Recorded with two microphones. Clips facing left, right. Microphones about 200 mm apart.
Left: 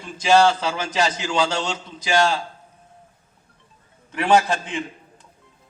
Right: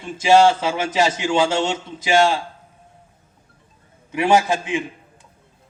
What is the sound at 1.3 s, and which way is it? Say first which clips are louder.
Speech: right 4 dB; 20° right (ahead or behind).